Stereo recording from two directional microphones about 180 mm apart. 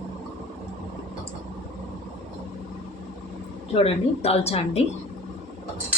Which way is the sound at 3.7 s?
35° left (ahead or behind).